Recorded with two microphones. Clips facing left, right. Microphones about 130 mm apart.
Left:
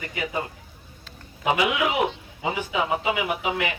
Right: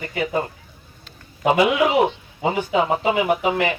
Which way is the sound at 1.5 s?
35° right (ahead or behind).